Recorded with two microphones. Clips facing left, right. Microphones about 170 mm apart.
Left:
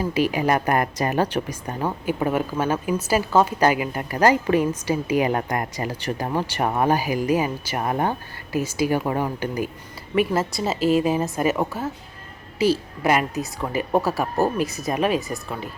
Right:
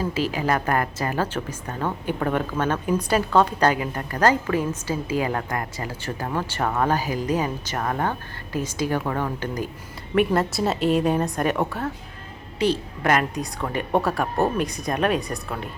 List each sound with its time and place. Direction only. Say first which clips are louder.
0.0 s a woman's voice: left 3 dB; 15° left (ahead or behind)